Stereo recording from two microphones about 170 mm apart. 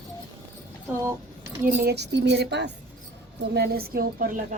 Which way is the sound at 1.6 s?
65° right (ahead or behind).